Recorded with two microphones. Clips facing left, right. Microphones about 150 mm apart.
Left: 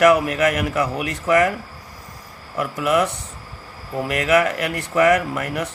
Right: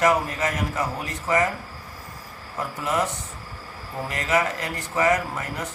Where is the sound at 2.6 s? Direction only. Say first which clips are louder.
Left 6 dB; 75° left (ahead or behind).